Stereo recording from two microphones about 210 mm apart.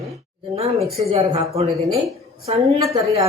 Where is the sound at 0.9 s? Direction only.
30° right (ahead or behind).